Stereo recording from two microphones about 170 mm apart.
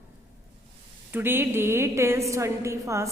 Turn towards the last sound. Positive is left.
turn(degrees=-15)  # may be behind; listen again after turning